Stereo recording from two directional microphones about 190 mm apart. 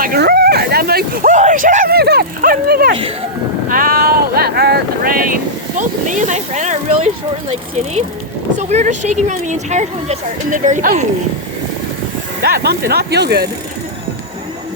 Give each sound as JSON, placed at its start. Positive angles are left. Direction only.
{"t": 0.0, "sound": "speech", "side_deg": -55}
{"t": 8.5, "sound": "speech", "side_deg": -40}
{"t": 12.4, "sound": "speech", "side_deg": -55}